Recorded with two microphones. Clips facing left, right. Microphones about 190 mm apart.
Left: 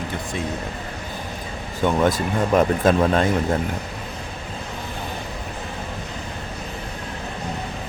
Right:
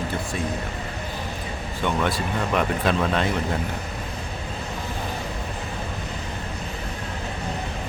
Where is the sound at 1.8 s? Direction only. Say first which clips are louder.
Left 5 dB; 45° left (ahead or behind).